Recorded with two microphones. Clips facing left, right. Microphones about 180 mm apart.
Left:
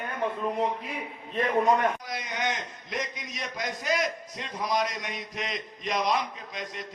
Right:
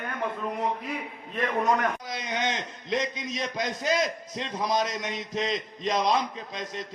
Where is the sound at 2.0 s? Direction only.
20° right (ahead or behind).